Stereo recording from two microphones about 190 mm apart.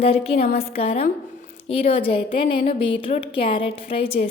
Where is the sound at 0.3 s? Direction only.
55° left (ahead or behind).